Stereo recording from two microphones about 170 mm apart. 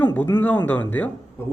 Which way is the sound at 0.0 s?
10° left (ahead or behind).